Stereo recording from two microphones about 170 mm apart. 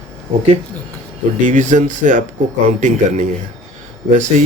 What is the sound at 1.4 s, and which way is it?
Speech, 45° right (ahead or behind).